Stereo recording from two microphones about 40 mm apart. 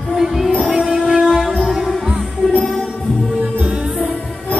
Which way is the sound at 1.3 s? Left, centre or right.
Centre.